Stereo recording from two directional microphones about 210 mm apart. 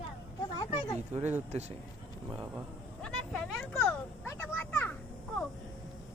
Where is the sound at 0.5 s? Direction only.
20° left (ahead or behind).